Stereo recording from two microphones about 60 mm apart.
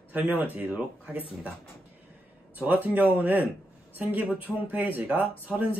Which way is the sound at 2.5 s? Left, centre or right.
Right.